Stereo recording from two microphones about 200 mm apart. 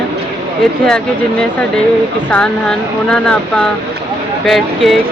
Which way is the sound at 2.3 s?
5° left (ahead or behind).